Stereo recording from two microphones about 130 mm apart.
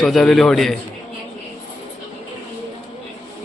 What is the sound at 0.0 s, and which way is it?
Speech, 5° left (ahead or behind).